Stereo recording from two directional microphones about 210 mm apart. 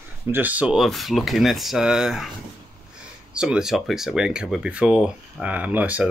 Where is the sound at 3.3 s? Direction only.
5° right (ahead or behind).